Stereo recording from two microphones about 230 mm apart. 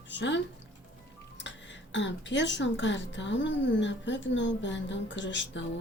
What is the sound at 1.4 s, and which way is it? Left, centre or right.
Speech, left.